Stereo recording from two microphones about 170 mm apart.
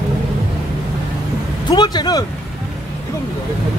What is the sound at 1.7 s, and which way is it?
Speech, 25° left (ahead or behind).